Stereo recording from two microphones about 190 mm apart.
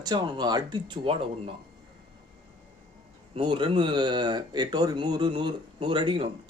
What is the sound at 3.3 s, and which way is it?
Speech, 25° right (ahead or behind).